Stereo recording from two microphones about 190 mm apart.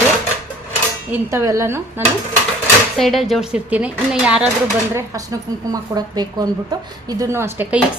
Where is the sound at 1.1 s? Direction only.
15° right (ahead or behind).